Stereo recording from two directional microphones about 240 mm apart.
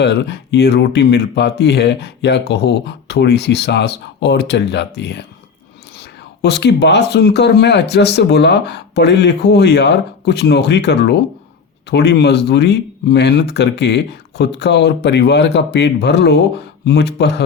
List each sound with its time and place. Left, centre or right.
0.0 s speech: left